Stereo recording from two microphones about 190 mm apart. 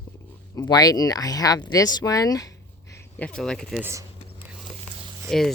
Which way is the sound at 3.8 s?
15° right (ahead or behind).